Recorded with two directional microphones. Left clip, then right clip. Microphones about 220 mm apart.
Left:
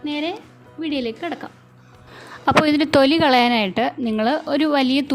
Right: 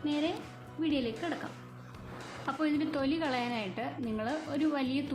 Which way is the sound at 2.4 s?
45° left (ahead or behind).